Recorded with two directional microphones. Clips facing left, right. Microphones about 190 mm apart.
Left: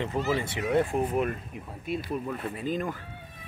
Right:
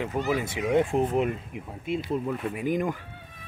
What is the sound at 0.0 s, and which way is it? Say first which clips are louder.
Speech: right 1 dB; centre (ahead or behind).